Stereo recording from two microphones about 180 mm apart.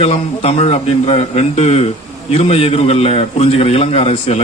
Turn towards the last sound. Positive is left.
turn(degrees=35)  # may be behind; listen again after turning